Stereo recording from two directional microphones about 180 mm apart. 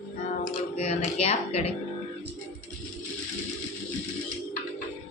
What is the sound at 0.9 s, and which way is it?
Speech, 35° left (ahead or behind).